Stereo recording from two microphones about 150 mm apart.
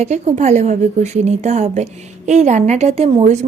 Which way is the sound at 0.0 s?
45° right (ahead or behind).